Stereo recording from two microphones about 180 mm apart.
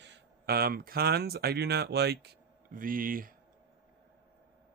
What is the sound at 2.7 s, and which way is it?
Speech, 50° right (ahead or behind).